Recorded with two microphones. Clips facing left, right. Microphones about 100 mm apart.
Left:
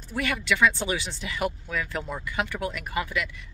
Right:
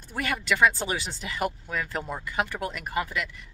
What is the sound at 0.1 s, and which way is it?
Speech, 40° right (ahead or behind).